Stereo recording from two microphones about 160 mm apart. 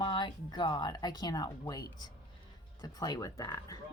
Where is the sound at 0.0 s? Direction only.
30° left (ahead or behind).